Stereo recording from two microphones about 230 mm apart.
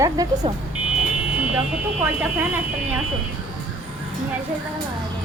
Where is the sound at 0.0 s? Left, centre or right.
Centre.